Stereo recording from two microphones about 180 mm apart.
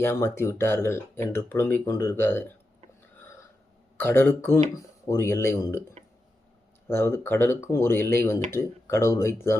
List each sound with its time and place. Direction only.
0.0 s speech: 15° left (ahead or behind)
3.9 s speech: 10° left (ahead or behind)
6.8 s speech: 15° left (ahead or behind)